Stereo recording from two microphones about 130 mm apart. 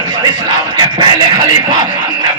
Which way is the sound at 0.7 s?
35° right (ahead or behind).